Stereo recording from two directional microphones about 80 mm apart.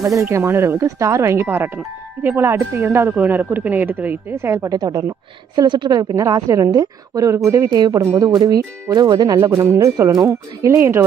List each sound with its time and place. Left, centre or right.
0.0 s speech: right
4.6 s a woman's voice: right
5.6 s a woman's voice: right
9.1 s a woman's voice: right
9.6 s speech: right